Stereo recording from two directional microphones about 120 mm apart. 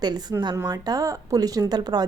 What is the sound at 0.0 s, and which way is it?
Speech, 35° right (ahead or behind).